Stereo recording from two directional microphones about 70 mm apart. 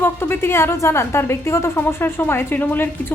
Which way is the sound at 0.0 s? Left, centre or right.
Left.